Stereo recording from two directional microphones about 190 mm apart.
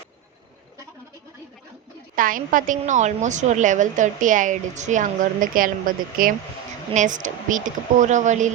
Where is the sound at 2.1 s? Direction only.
45° right (ahead or behind).